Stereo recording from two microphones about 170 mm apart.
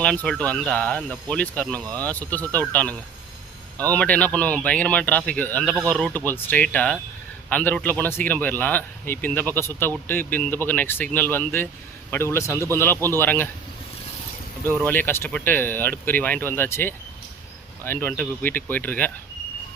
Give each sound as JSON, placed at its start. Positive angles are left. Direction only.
{"t": 0.0, "sound": "a man's voice", "side_deg": 5}
{"t": 14.8, "sound": "a man's voice", "side_deg": 10}